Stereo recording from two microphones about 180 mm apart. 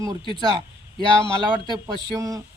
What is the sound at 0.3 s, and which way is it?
Speech, 25° right (ahead or behind).